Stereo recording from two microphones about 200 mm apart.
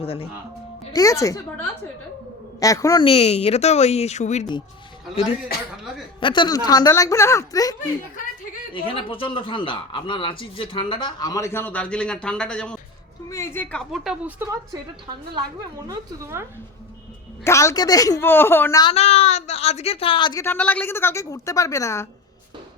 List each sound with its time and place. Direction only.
0.0 s speech: 30° left (ahead or behind)
0.9 s speech: 15° left (ahead or behind)
2.6 s a woman's voice: 15° left (ahead or behind); by 4.4 s 35° left (ahead or behind)
5.5 s a man's voice: 50° left (ahead or behind)
6.1 s a woman's voice: 25° left (ahead or behind); by 14.8 s 10° right (ahead or behind)
15.9 s a woman's voice: 10° right (ahead or behind)
17.4 s speech: 15° left (ahead or behind)
20.4 s speech: 10° left (ahead or behind)